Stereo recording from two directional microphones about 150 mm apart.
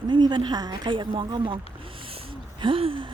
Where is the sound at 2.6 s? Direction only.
35° right (ahead or behind).